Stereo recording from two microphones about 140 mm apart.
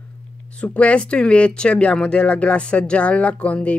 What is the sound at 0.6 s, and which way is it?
Speech, 10° left (ahead or behind).